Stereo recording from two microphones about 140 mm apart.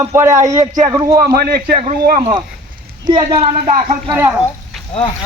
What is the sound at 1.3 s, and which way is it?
Speech, 90° right.